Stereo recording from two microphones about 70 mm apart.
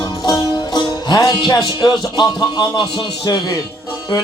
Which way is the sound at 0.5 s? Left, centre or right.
Left.